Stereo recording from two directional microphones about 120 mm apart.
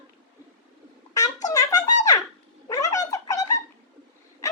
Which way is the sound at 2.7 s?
30° left (ahead or behind).